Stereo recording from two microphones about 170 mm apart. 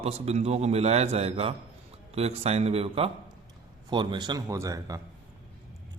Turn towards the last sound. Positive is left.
turn(degrees=-20)  # may be behind; listen again after turning